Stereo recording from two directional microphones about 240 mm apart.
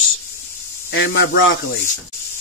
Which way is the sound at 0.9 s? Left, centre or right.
Left.